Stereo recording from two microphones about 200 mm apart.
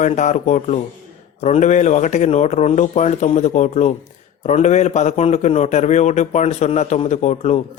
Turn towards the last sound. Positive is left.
turn(degrees=35)  # may be behind; listen again after turning